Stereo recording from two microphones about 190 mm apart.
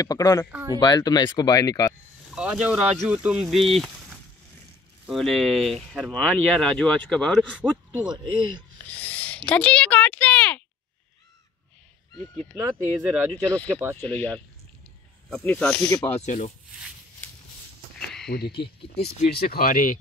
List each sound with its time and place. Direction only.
0.0 s speech: 20° left (ahead or behind)
0.5 s speech: 10° right (ahead or behind)
0.7 s speech: 20° left (ahead or behind)
2.3 s speech: 5° right (ahead or behind)
8.0 s speech: 20° right (ahead or behind)
8.8 s a woman's voice: 10° left (ahead or behind)
12.5 s speech: 15° right (ahead or behind)
13.3 s speech: 10° left (ahead or behind)
16.2 s speech: 40° left (ahead or behind)
18.0 s a sound: 5° left (ahead or behind)
18.3 s speech: 60° left (ahead or behind)